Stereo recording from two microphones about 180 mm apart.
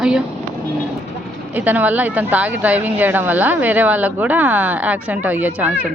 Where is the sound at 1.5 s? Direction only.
10° right (ahead or behind).